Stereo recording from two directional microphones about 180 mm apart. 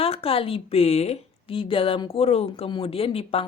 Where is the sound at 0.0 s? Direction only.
30° left (ahead or behind).